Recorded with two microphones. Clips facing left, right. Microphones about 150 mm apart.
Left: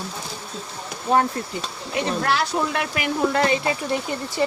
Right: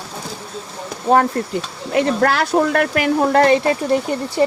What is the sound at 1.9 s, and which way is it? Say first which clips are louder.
Speech: right 7 dB; 55° right (ahead or behind).